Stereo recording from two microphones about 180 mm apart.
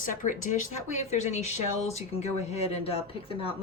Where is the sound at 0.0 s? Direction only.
45° left (ahead or behind).